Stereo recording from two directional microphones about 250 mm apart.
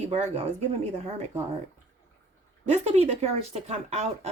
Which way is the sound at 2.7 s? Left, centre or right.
Right.